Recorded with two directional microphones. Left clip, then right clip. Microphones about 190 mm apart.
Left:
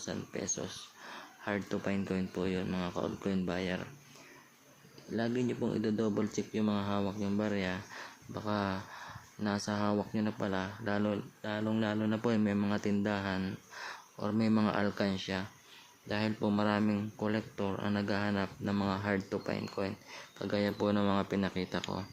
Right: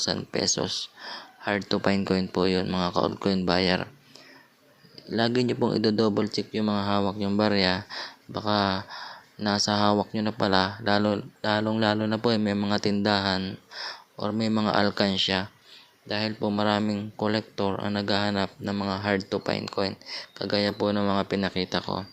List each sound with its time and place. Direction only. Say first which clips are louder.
0.0 s speech: right 13 dB; 25° right (ahead or behind)
1.5 s speech: right 9 dB; 10° right (ahead or behind)
2.0 s speech: right 11 dB; 20° right (ahead or behind)
2.6 s speech: right 10 dB; centre (ahead or behind)
2.9 s speech: right 12 dB; 20° right (ahead or behind)
5.1 s speech: right 9 dB; 20° right (ahead or behind)
7.9 s speech: right 9 dB; 10° right (ahead or behind)
16.0 s speech: right 6 dB; centre (ahead or behind)